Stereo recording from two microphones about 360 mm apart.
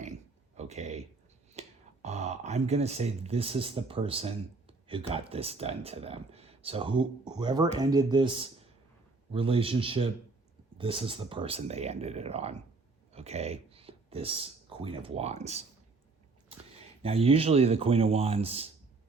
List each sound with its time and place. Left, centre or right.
0.0 s a sound: centre
1.5 s speech: centre
17.0 s speech: centre